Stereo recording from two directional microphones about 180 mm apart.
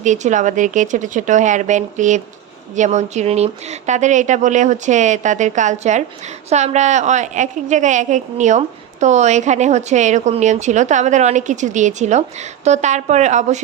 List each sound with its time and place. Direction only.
0.0 s a woman's voice: 40° right (ahead or behind)